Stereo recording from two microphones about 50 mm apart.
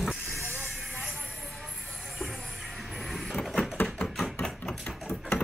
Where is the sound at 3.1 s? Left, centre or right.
Centre.